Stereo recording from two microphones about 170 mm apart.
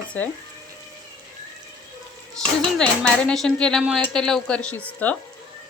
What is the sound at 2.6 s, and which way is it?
Speech, 5° left (ahead or behind).